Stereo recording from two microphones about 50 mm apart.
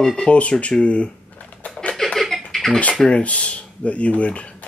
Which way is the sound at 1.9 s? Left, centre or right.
Centre.